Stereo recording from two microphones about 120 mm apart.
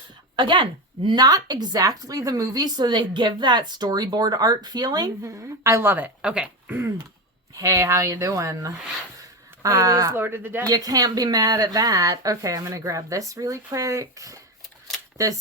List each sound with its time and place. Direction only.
0.3 s a woman's voice: 40° right (ahead or behind); by 6.9 s 15° right (ahead or behind)
7.5 s speech: 30° right (ahead or behind)
10.7 s speech: 30° right (ahead or behind)